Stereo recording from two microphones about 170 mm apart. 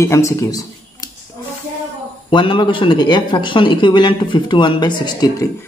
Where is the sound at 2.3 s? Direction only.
30° left (ahead or behind).